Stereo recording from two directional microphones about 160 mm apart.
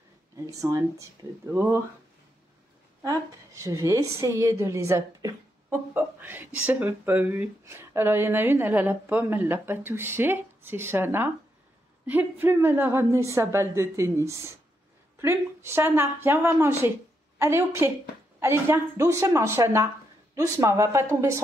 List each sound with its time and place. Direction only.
0.5 s a woman's voice: 20° right (ahead or behind)
3.0 s a woman's voice: 20° right (ahead or behind)